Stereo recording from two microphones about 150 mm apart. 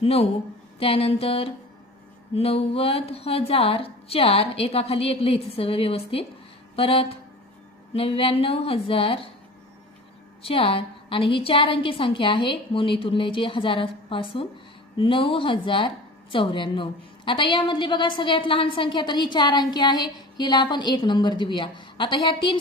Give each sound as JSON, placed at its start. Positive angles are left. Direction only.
{"t": 0.0, "sound": "a woman's voice", "side_deg": 40}
{"t": 10.4, "sound": "a woman's voice", "side_deg": 40}